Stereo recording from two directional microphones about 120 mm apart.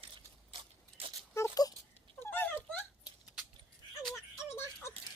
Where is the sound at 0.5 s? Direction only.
45° right (ahead or behind).